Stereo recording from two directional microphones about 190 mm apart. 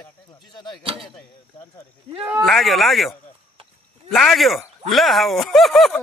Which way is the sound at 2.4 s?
Centre (ahead or behind).